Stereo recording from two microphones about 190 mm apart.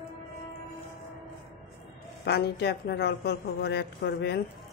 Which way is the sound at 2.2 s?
60° left (ahead or behind).